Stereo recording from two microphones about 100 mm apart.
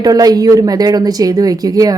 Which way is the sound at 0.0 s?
40° right (ahead or behind).